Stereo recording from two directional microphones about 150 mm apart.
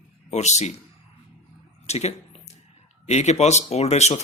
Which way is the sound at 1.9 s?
45° left (ahead or behind).